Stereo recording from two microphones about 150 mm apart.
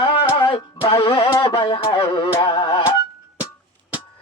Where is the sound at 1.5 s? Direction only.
35° left (ahead or behind).